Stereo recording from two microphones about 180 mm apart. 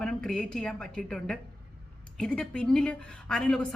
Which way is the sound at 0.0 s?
5° left (ahead or behind).